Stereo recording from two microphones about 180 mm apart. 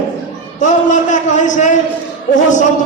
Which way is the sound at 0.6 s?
45° left (ahead or behind).